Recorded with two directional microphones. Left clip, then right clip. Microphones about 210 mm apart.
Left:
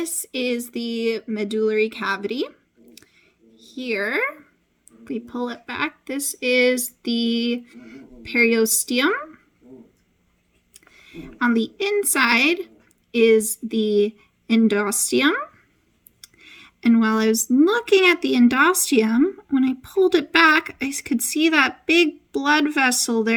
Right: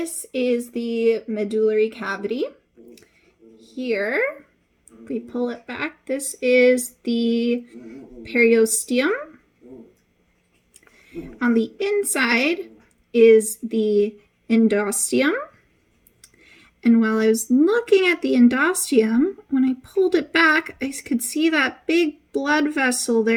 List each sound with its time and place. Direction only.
0.0 s speech: 50° left (ahead or behind)
2.9 s a sound: 50° left (ahead or behind)
5.0 s speech: 50° left (ahead or behind)
10.8 s a woman's voice: 50° left (ahead or behind)